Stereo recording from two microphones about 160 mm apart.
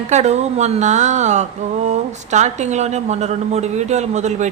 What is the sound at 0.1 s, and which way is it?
Speech, 45° right (ahead or behind).